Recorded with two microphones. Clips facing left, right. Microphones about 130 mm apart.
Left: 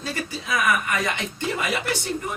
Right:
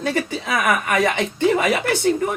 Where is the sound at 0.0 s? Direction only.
65° right (ahead or behind).